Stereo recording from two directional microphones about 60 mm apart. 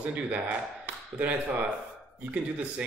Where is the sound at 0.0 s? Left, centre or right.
Right.